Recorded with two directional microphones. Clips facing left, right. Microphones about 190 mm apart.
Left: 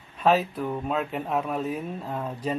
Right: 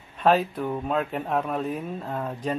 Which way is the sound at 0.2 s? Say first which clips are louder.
Right 1 dB; centre (ahead or behind).